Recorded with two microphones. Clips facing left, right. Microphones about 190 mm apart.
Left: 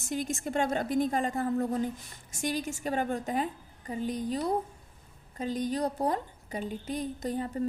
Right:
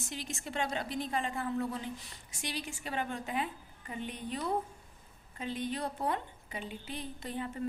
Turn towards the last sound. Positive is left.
turn(degrees=40)  # may be behind; listen again after turning